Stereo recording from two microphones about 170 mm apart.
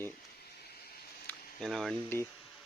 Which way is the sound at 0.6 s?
70° left (ahead or behind).